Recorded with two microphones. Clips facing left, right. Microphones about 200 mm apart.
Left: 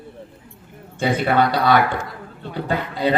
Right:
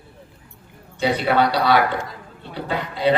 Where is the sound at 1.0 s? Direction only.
50° left (ahead or behind).